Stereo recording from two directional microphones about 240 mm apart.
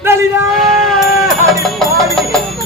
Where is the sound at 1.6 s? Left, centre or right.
Centre.